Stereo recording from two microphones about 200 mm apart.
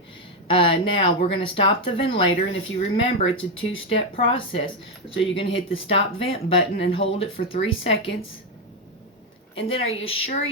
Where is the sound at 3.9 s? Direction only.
25° left (ahead or behind).